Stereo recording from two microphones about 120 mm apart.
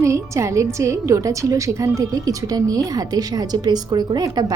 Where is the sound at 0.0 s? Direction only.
25° right (ahead or behind).